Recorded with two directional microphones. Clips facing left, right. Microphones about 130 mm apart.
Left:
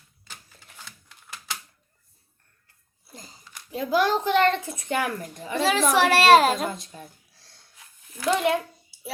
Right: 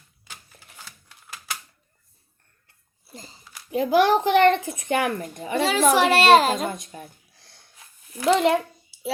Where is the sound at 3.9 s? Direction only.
65° right (ahead or behind).